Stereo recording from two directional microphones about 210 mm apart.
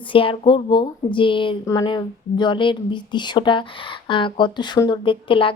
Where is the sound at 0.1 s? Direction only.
25° left (ahead or behind).